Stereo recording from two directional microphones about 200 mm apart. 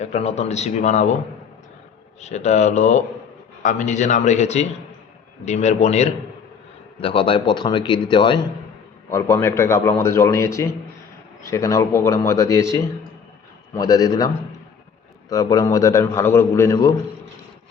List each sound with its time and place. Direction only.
0.0 s speech: 35° left (ahead or behind)
2.2 s a man's voice: 35° left (ahead or behind); by 12.6 s 15° left (ahead or behind)
13.7 s a man's voice: 15° left (ahead or behind)
15.3 s a man's voice: 20° left (ahead or behind)